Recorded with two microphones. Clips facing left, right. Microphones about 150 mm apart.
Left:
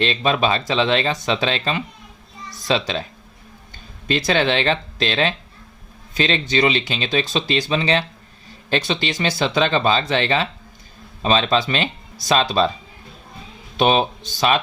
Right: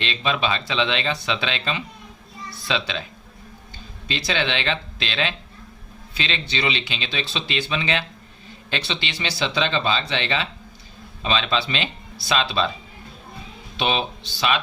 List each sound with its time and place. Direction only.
0.0 s a woman's voice: 40° left (ahead or behind)
4.1 s speech: 50° left (ahead or behind)
13.7 s speech: 45° left (ahead or behind)